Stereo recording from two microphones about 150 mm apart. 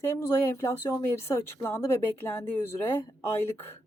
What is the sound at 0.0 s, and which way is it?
Speech, 15° left (ahead or behind).